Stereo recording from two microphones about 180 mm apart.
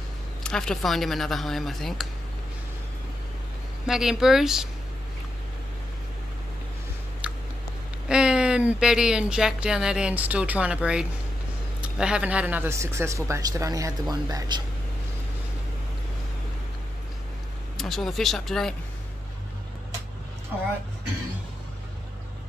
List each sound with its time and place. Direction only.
0.4 s speech: 5° left (ahead or behind)
3.8 s speech: 5° right (ahead or behind)
7.2 s a sound: 5° right (ahead or behind)
8.1 s speech: 5° right (ahead or behind); by 14.6 s 25° right (ahead or behind)
17.7 s speech: centre (ahead or behind)